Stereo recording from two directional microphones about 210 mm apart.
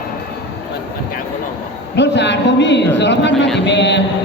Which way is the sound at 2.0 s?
55° left (ahead or behind).